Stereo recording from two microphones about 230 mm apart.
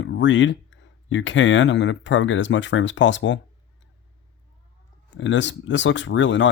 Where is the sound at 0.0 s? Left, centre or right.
Left.